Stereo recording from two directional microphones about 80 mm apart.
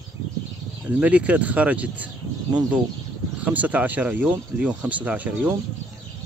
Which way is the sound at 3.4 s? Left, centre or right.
Centre.